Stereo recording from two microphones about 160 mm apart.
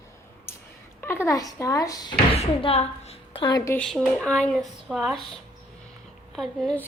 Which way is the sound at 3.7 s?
5° left (ahead or behind).